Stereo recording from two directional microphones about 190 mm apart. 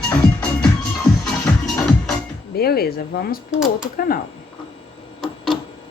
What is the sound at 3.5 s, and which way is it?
Speech, centre (ahead or behind).